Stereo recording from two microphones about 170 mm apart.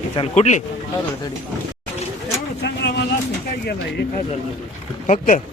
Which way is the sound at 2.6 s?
85° left.